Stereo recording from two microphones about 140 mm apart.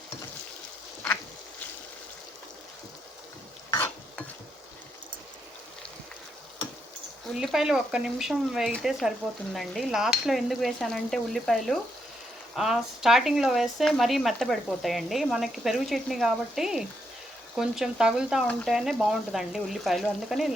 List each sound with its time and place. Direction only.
3.7 s stir: 20° left (ahead or behind)
7.3 s speech: 5° right (ahead or behind)